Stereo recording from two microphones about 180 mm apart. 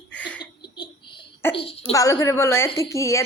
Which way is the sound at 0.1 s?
5° left (ahead or behind).